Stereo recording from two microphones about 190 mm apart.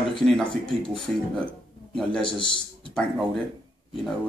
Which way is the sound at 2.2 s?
25° left (ahead or behind).